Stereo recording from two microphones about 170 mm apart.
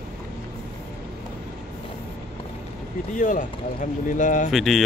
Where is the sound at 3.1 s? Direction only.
50° left (ahead or behind).